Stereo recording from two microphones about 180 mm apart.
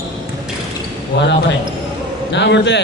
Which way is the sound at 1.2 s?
75° left (ahead or behind).